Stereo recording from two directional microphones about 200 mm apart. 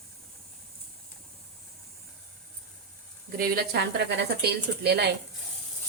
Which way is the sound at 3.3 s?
50° right (ahead or behind).